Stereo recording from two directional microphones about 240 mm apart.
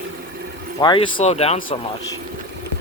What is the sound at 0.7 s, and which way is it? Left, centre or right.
Speech, centre.